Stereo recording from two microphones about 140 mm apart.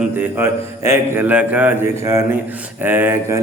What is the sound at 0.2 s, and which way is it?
Mantra, 15° right (ahead or behind).